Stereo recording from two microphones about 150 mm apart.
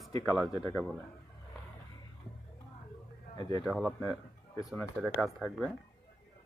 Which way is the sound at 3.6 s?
Centre (ahead or behind).